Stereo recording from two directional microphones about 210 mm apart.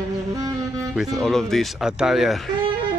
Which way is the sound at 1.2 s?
Centre (ahead or behind).